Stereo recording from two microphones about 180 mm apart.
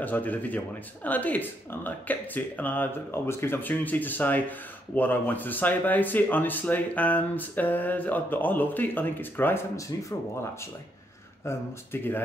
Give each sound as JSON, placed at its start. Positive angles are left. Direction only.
{"t": 0.0, "sound": "speech", "side_deg": 10}
{"t": 11.4, "sound": "speech", "side_deg": 10}